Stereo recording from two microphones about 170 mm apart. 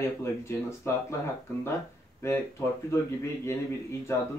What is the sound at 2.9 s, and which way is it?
Speech, 15° left (ahead or behind).